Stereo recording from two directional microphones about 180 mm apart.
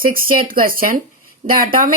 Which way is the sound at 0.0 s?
50° right (ahead or behind).